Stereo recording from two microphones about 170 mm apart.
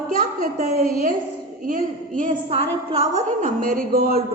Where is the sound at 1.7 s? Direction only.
50° right (ahead or behind).